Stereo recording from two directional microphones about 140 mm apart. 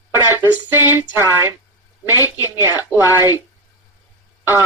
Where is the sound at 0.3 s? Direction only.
15° right (ahead or behind).